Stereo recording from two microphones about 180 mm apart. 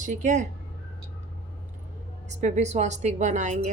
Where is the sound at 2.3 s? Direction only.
40° right (ahead or behind).